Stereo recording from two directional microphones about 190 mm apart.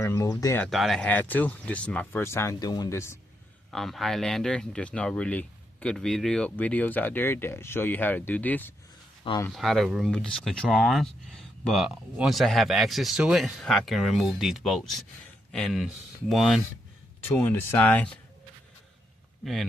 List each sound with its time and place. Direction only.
0.0 s speech: 15° left (ahead or behind)
0.7 s speech: centre (ahead or behind)
3.7 s speech: centre (ahead or behind)
17.2 s speech: 10° left (ahead or behind)